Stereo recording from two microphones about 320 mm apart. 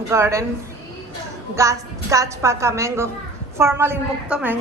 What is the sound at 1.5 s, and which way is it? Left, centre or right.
A woman's voice, centre.